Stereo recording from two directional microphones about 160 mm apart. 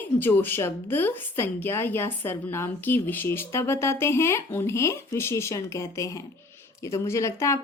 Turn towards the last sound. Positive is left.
turn(degrees=20)  # may be behind; listen again after turning